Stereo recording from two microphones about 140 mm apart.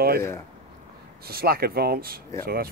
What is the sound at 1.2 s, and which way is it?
Speech, 90° right.